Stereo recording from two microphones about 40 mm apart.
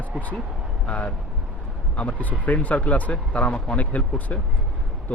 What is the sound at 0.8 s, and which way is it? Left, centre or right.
A man's voice, left.